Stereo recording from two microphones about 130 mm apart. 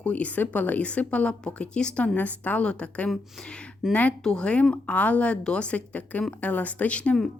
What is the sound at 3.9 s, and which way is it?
A woman's voice, 10° left (ahead or behind).